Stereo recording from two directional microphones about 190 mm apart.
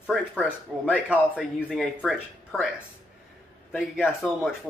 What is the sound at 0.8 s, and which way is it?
A man's voice, 5° right (ahead or behind).